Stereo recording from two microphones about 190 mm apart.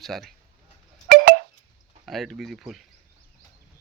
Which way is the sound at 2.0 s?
Centre (ahead or behind).